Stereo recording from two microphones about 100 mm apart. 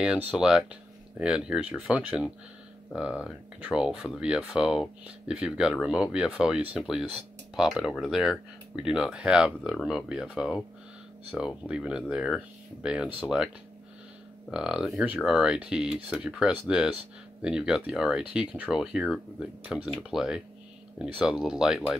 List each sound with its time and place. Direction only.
0.0 s speech: 10° right (ahead or behind)
14.5 s speech: 5° right (ahead or behind)